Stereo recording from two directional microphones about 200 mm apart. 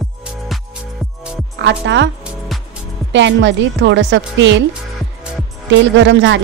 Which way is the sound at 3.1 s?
65° right (ahead or behind).